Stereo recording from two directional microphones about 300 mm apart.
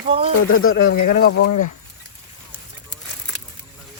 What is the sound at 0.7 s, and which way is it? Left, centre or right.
Speech, left.